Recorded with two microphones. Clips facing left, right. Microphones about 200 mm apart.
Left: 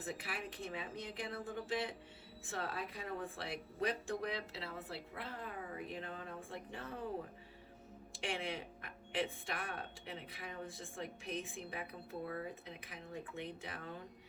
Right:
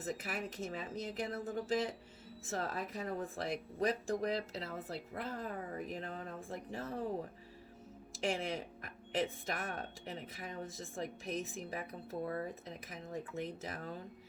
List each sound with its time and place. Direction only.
0.1 s speech: 40° right (ahead or behind)
8.2 s speech: 40° right (ahead or behind)